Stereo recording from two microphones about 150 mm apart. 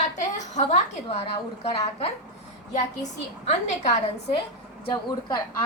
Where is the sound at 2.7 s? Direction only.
50° left (ahead or behind).